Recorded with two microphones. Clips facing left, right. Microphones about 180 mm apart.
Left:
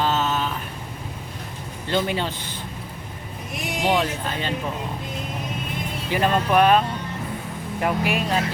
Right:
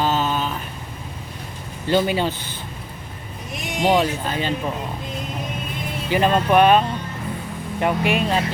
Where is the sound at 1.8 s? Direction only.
5° right (ahead or behind).